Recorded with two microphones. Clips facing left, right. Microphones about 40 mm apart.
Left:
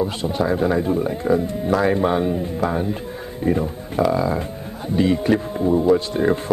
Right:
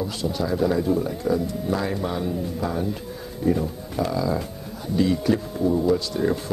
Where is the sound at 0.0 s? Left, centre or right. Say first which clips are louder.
Left 5 dB; left.